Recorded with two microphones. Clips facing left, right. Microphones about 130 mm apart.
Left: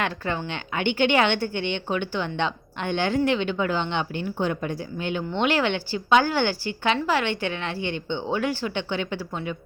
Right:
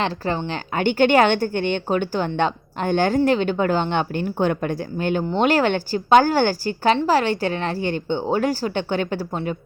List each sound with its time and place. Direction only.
0.0 s a woman's voice: 30° right (ahead or behind)